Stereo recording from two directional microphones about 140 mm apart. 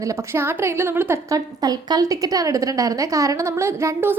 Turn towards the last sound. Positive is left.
turn(degrees=-15)  # may be behind; listen again after turning